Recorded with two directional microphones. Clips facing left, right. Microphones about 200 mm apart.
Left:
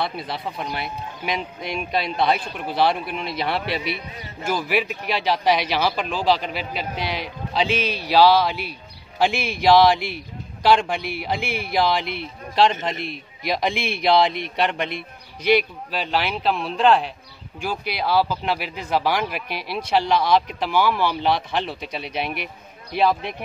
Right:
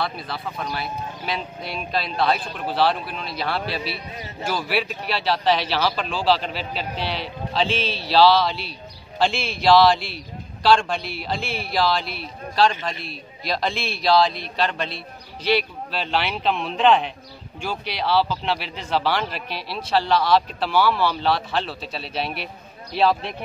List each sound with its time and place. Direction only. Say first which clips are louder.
0.0 s a man's voice: left 1 dB; 20° left (ahead or behind)